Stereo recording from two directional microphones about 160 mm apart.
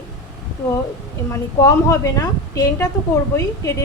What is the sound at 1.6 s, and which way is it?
A woman's voice, 20° left (ahead or behind).